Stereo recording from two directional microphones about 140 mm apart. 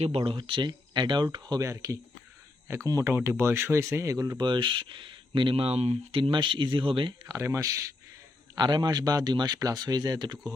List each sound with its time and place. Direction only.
0.0 s speech: 40° right (ahead or behind); by 4.4 s 20° right (ahead or behind)
4.4 s speech: 35° right (ahead or behind)
7.3 s speech: 20° right (ahead or behind)